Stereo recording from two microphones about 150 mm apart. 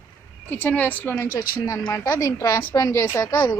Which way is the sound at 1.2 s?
75° left (ahead or behind).